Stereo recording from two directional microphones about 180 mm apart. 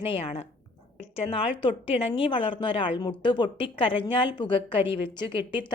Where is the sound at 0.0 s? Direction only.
30° left (ahead or behind).